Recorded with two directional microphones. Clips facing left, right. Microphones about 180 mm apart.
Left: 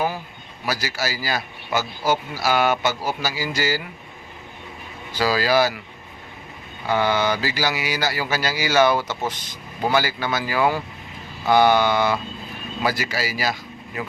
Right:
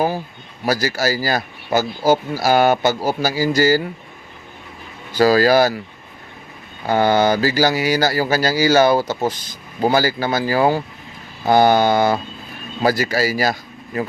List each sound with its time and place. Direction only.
0.6 s speech: 40° right (ahead or behind)
5.1 s speech: 45° right (ahead or behind)
6.8 s speech: 45° right (ahead or behind)